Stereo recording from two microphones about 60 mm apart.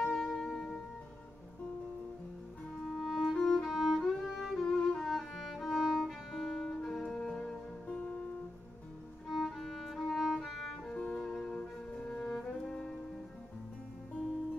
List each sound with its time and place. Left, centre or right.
0.0 s music: centre
2.8 s music: centre
3.4 s music: centre
3.7 s music: centre
6.3 s music: centre
9.4 s music: centre
10.9 s music: centre